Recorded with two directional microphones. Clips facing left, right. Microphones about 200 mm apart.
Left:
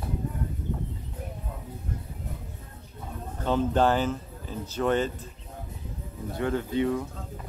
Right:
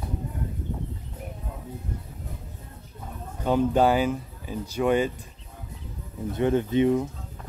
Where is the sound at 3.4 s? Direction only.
10° right (ahead or behind).